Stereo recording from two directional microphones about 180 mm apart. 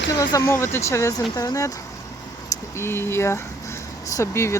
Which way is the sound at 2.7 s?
15° left (ahead or behind).